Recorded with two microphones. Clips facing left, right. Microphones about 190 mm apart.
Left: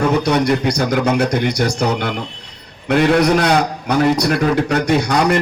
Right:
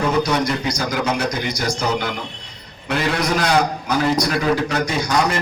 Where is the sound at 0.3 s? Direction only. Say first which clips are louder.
Left 5 dB; 60° left (ahead or behind).